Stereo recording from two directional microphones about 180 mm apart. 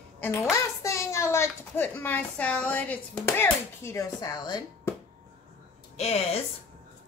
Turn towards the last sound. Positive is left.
turn(degrees=35)  # may be behind; listen again after turning